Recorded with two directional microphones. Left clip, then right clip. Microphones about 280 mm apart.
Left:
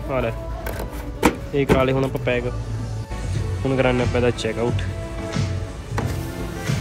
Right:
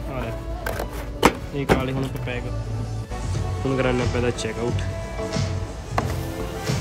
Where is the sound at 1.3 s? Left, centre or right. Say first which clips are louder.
Left 3 dB; centre.